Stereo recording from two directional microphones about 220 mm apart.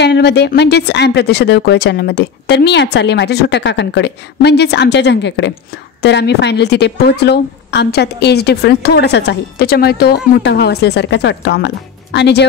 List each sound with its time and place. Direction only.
0.0 s a woman's voice: 50° left (ahead or behind)